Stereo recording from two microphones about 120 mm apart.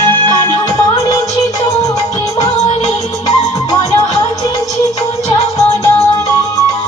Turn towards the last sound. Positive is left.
turn(degrees=30)  # may be behind; listen again after turning